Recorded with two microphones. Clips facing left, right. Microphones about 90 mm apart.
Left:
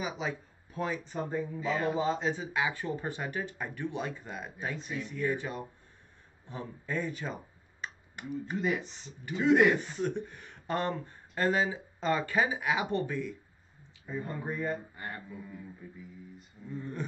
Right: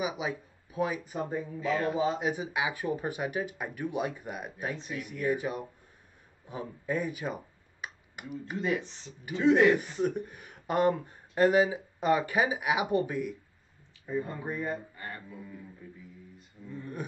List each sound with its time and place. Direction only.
0.0 s speech: 10° right (ahead or behind)
15.0 s music: 20° left (ahead or behind)